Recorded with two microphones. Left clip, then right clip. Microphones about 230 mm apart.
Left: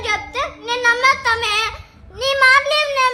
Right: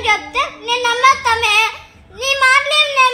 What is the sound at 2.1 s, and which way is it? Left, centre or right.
Speech, centre.